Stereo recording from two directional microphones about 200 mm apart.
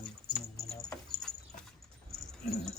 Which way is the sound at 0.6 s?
Centre (ahead or behind).